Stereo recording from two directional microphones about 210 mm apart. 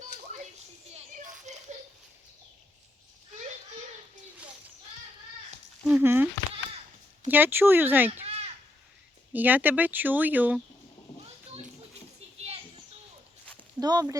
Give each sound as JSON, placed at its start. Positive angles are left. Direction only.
{"t": 0.0, "sound": "children playing", "side_deg": -35}
{"t": 5.8, "sound": "speech", "side_deg": -5}
{"t": 7.3, "sound": "speech", "side_deg": -10}
{"t": 8.1, "sound": "a sound", "side_deg": -30}
{"t": 9.3, "sound": "speech", "side_deg": -10}
{"t": 13.7, "sound": "speech", "side_deg": -20}